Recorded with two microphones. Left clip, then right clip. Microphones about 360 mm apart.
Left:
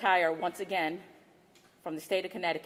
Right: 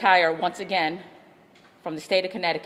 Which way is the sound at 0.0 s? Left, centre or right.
Right.